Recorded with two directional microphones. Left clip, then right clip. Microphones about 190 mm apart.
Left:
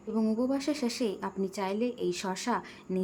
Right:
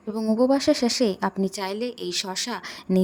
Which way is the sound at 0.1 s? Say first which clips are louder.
Right 9 dB; 35° right (ahead or behind).